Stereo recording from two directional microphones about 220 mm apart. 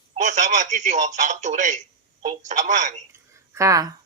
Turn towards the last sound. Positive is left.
turn(degrees=-15)  # may be behind; listen again after turning